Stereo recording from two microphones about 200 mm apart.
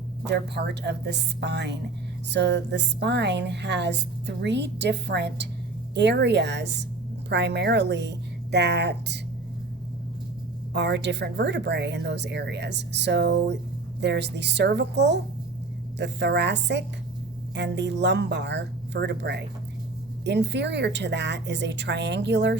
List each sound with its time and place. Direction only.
0.3 s a woman's voice: 55° right (ahead or behind)
10.8 s a woman's voice: 60° right (ahead or behind)